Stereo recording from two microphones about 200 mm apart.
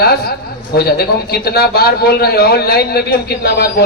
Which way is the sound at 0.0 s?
50° left (ahead or behind).